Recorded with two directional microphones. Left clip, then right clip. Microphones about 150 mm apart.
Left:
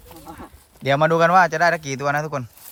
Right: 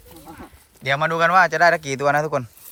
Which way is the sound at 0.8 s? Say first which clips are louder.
Left 2 dB; 35° left (ahead or behind).